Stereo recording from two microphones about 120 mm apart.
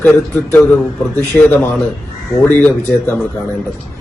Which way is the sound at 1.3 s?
10° left (ahead or behind).